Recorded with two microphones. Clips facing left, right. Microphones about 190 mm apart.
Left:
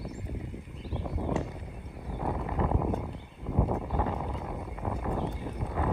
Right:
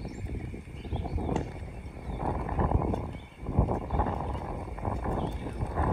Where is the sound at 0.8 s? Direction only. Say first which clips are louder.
Even; 25° right (ahead or behind).